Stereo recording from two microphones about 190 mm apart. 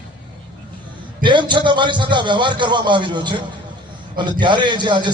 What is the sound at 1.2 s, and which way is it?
A man's voice, 25° right (ahead or behind).